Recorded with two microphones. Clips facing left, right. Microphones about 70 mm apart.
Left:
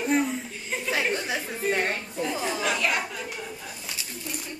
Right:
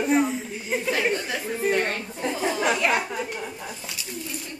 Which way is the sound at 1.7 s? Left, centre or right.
Centre.